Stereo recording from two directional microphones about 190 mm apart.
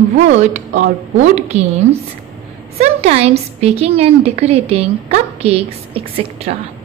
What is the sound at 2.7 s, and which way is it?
A woman's voice, 35° right (ahead or behind).